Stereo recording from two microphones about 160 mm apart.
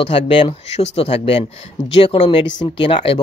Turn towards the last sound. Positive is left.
turn(degrees=35)  # may be behind; listen again after turning